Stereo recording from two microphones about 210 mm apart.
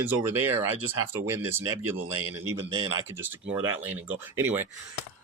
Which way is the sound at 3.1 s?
10° right (ahead or behind).